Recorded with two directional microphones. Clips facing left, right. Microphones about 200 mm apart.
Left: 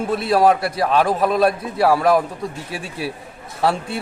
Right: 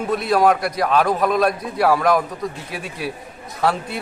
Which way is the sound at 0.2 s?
30° left (ahead or behind).